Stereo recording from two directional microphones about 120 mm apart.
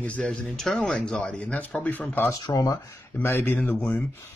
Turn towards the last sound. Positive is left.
turn(degrees=10)  # may be behind; listen again after turning